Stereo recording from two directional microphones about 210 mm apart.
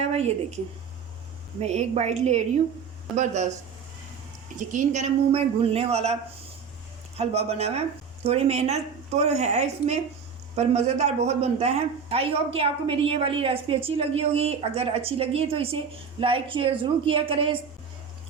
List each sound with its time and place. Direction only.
0.1 s speech: 30° right (ahead or behind)
1.6 s speech: 30° right (ahead or behind)
4.7 s speech: 35° right (ahead or behind)
7.2 s a man's voice: 30° right (ahead or behind)